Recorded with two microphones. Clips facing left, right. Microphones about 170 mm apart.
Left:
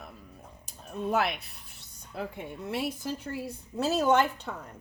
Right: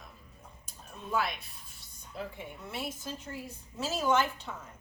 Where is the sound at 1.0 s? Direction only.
70° left (ahead or behind).